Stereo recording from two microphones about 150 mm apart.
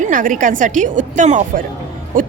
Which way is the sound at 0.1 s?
60° right (ahead or behind).